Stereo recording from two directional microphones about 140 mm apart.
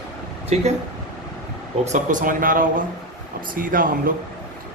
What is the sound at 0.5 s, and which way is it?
Speech, 50° right (ahead or behind).